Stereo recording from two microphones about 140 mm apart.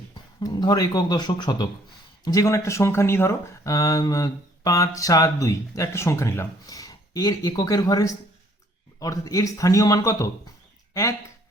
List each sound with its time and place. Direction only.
0.1 s speech: 30° left (ahead or behind)